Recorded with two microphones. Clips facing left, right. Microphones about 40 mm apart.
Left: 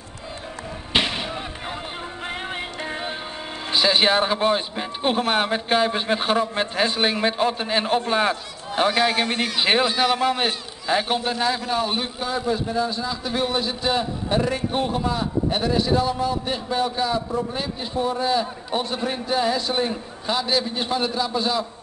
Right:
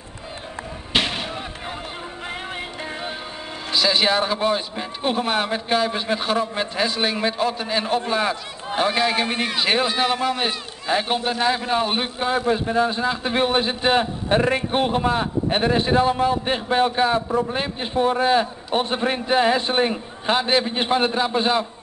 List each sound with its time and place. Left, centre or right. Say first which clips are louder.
0.9 s a sound: even; centre
2.2 s music: left 1 dB; centre
3.7 s a man's voice: left 1 dB; centre
9.2 s a man's voice: even; centre
9.6 s a man's voice: left 1 dB; centre; by 21.6 s right